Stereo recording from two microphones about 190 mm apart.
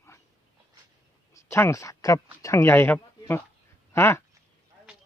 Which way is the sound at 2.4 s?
15° left (ahead or behind).